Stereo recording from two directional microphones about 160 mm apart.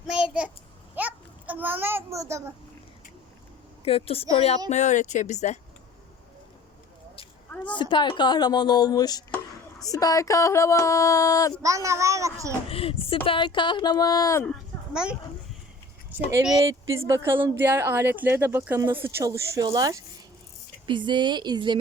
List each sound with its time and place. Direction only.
0.1 s child singing: 5° right (ahead or behind)
0.9 s a sound: 10° right (ahead or behind)
3.8 s speech: 35° left (ahead or behind)
7.5 s a sound: 10° left (ahead or behind)
7.8 s a sound: 30° left (ahead or behind)
11.6 s a child's voice: 20° right (ahead or behind)
12.6 s speech: 35° left (ahead or behind)
16.1 s speech: 10° right (ahead or behind)
16.6 s a child's voice: 20° right (ahead or behind)